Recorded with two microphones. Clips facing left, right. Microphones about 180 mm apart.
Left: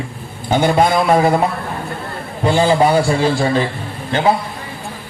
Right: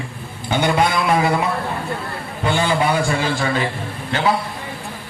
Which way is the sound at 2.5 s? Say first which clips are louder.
Left 6 dB; 35° left (ahead or behind).